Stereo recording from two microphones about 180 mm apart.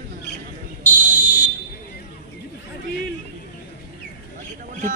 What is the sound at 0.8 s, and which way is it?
Fire alarm, 45° left (ahead or behind).